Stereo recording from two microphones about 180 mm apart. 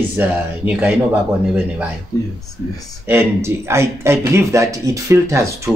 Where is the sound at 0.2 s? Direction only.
10° right (ahead or behind).